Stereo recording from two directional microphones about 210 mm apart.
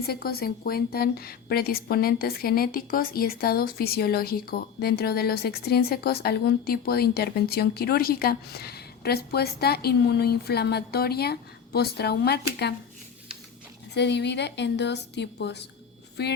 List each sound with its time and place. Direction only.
0.1 s a woman's voice: 45° left (ahead or behind)
13.9 s a woman's voice: 55° left (ahead or behind)